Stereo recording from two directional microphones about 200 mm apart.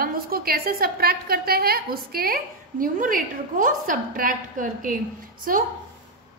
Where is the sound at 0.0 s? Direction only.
50° right (ahead or behind).